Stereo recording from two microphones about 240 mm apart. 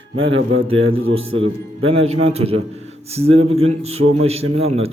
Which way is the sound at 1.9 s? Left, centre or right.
Right.